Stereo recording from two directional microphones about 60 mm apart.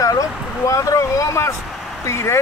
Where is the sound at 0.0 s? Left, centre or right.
Left.